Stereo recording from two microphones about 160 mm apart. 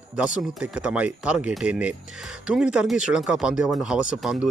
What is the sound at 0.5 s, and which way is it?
Speech, 5° right (ahead or behind).